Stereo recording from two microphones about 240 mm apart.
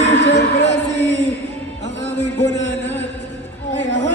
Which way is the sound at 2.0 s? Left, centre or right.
Left.